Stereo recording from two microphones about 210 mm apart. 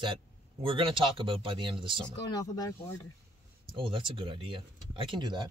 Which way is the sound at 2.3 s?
15° left (ahead or behind).